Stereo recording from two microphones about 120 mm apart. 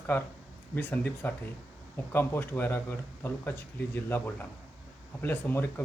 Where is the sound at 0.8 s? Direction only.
15° left (ahead or behind).